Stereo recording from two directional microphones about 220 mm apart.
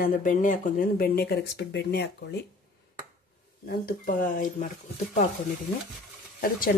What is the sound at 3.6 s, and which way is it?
Speech, 40° left (ahead or behind).